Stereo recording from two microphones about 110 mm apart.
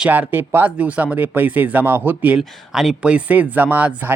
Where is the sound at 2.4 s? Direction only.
5° right (ahead or behind).